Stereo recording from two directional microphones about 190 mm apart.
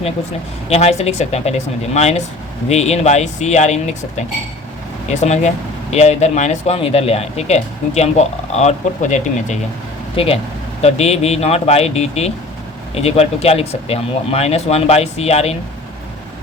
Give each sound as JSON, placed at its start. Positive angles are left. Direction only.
{"t": 0.7, "sound": "speech", "side_deg": 35}